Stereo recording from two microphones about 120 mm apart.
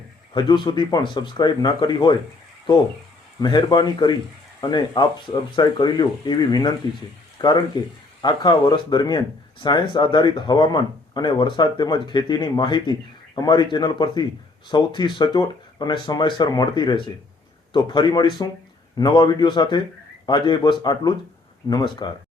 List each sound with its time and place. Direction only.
0.3 s speech: 40° left (ahead or behind)
3.4 s speech: 35° left (ahead or behind)